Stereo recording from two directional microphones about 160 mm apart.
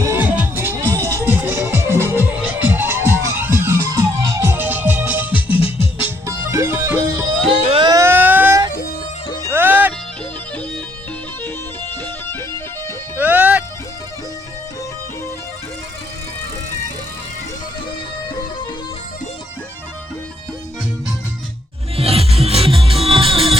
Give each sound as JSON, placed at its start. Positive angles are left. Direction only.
{"t": 0.0, "sound": "music", "side_deg": -15}
{"t": 7.6, "sound": "vehicle", "side_deg": -35}
{"t": 7.9, "sound": "a sound", "side_deg": -20}
{"t": 8.7, "sound": "music", "side_deg": 70}
{"t": 9.5, "sound": "music", "side_deg": -10}
{"t": 11.4, "sound": "music", "side_deg": 15}
{"t": 13.1, "sound": "music", "side_deg": -10}
{"t": 21.9, "sound": "music", "side_deg": -35}